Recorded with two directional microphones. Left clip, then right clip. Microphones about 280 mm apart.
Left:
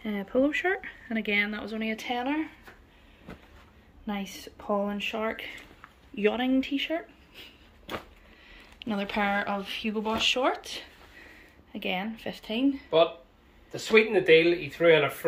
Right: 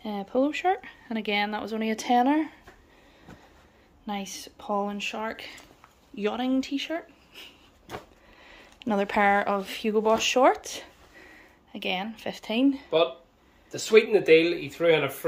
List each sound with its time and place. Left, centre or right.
0.0 s speech: centre; by 2.5 s right
4.0 s speech: centre
11.7 s speech: centre
13.7 s speech: right